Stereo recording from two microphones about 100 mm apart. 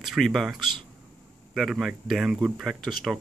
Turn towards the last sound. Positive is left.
turn(degrees=0)  # may be behind; listen again after turning